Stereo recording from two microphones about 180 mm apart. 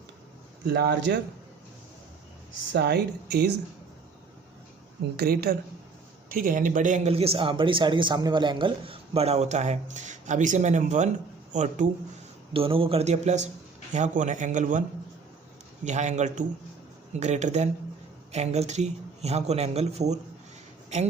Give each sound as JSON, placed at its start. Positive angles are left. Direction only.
{"t": 0.7, "sound": "speech", "side_deg": -70}
{"t": 2.7, "sound": "speech", "side_deg": -65}
{"t": 5.1, "sound": "speech", "side_deg": -60}
{"t": 6.2, "sound": "a man's voice", "side_deg": -50}
{"t": 12.5, "sound": "a man's voice", "side_deg": -30}